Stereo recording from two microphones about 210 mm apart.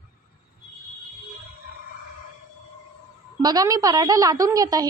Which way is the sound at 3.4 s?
20° right (ahead or behind).